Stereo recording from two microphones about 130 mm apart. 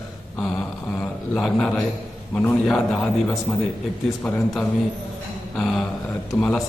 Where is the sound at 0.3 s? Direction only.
5° left (ahead or behind).